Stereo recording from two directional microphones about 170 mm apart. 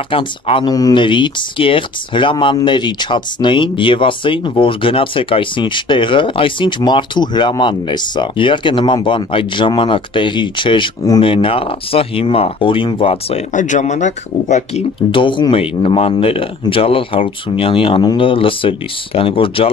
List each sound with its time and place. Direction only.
0.1 s speech: 30° left (ahead or behind)
15.0 s speech: 30° left (ahead or behind)